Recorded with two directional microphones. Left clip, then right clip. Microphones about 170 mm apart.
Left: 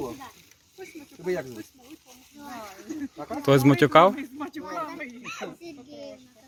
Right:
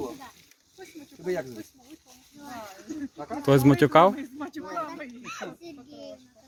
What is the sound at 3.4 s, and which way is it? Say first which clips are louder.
Speech: left 1 dB; 20° right (ahead or behind).